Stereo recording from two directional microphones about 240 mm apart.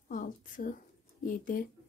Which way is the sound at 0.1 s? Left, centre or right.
Left.